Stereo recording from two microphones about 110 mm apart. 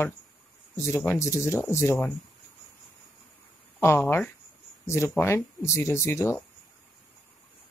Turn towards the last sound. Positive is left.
turn(degrees=25)  # may be behind; listen again after turning